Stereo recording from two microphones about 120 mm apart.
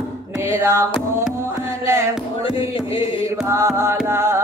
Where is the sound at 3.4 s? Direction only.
25° right (ahead or behind).